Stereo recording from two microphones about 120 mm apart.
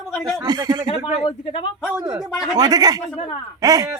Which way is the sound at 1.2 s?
55° left (ahead or behind).